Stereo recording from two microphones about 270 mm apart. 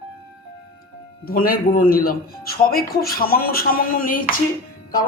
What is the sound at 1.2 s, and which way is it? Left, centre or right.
A man's voice, left.